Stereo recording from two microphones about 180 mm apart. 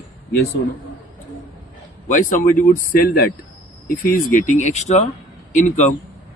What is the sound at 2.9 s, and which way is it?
Speech, 55° left (ahead or behind).